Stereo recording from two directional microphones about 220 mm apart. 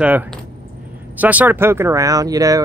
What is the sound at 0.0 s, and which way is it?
Speech, 5° right (ahead or behind).